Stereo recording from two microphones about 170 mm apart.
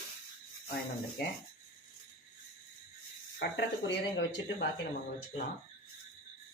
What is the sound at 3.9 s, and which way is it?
Speech, 90° left.